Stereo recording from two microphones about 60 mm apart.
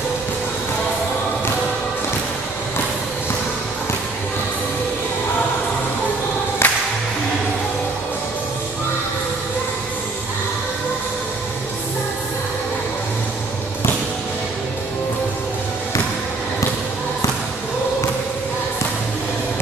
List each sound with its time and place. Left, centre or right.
6.6 s music: left